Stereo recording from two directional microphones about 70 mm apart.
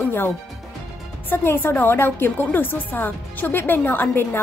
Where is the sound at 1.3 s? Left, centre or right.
Left.